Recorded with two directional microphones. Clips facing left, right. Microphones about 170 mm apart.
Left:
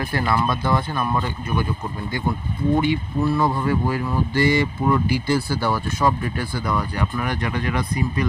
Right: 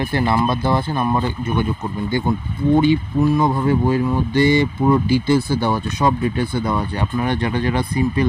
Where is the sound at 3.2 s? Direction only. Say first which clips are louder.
Right 3 dB; 15° right (ahead or behind).